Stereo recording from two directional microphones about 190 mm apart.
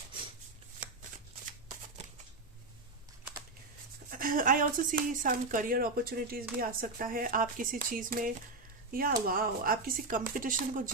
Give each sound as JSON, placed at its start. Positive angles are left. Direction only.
{"t": 4.1, "sound": "speech", "side_deg": -45}